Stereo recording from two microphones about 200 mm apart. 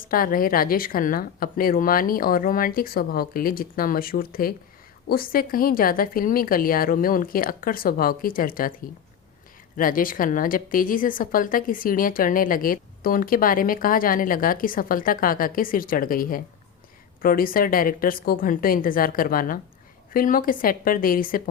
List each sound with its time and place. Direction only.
0.0 s speech: 45° left (ahead or behind)